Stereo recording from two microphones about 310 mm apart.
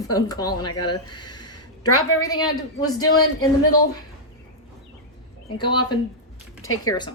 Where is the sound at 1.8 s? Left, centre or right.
Left.